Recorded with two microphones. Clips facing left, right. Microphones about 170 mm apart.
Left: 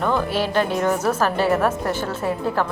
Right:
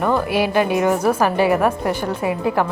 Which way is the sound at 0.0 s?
10° right (ahead or behind).